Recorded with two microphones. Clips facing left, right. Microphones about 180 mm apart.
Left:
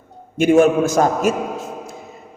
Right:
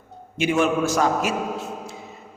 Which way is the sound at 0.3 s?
50° left (ahead or behind).